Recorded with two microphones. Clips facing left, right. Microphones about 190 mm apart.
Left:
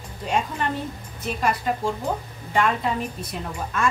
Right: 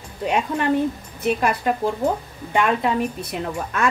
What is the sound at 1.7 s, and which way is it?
Speech, 60° right (ahead or behind).